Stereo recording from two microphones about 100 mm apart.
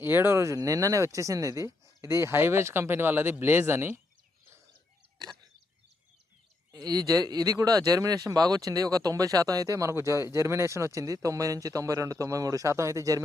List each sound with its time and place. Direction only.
0.0 s speech: 20° right (ahead or behind)
6.7 s speech: 40° right (ahead or behind)